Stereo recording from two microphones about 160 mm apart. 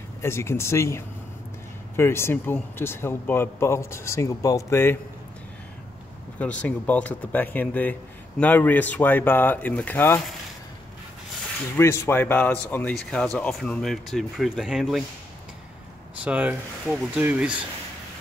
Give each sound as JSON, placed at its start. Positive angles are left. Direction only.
{"t": 0.2, "sound": "speech", "side_deg": 15}
{"t": 6.3, "sound": "speech", "side_deg": 10}
{"t": 11.7, "sound": "speech", "side_deg": 15}
{"t": 16.2, "sound": "speech", "side_deg": -10}